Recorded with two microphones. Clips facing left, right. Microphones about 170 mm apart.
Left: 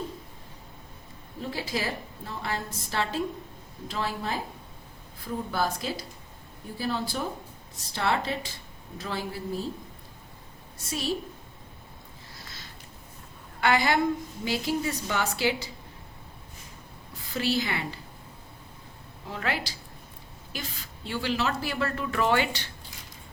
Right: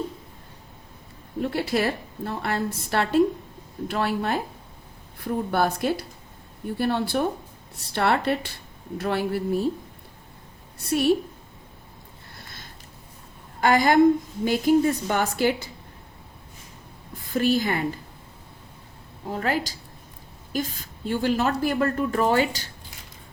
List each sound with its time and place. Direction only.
1.4 s a woman's voice: 65° right (ahead or behind)
10.8 s a woman's voice: 60° right (ahead or behind)
12.4 s a sound: 55° right (ahead or behind)
13.6 s a woman's voice: 45° right (ahead or behind)
17.3 s a woman's voice: 50° right (ahead or behind)
19.3 s a woman's voice: 40° right (ahead or behind)